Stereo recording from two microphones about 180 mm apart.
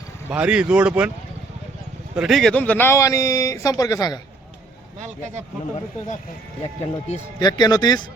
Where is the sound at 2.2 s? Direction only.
Centre (ahead or behind); by 4.2 s 20° left (ahead or behind).